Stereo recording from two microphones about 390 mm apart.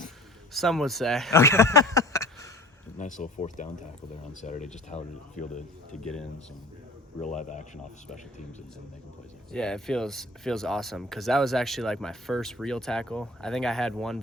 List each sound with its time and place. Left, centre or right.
0.5 s speech: centre
3.0 s speech: centre
7.2 s speech: centre
9.5 s speech: centre